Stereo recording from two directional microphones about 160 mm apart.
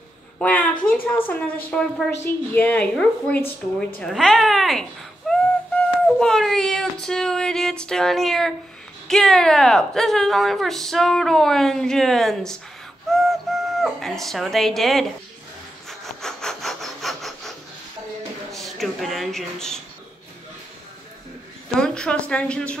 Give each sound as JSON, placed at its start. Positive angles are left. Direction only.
{"t": 0.4, "sound": "a sound", "side_deg": 10}
{"t": 1.0, "sound": "a woman's voice", "side_deg": 15}
{"t": 13.1, "sound": "a sound", "side_deg": 0}
{"t": 15.9, "sound": "sawing", "side_deg": 0}
{"t": 18.5, "sound": "speech", "side_deg": 0}
{"t": 21.7, "sound": "speech", "side_deg": 5}